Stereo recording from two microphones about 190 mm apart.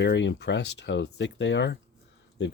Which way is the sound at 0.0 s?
70° left (ahead or behind).